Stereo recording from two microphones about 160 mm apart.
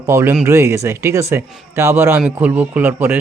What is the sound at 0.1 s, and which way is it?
A man's voice, 15° right (ahead or behind).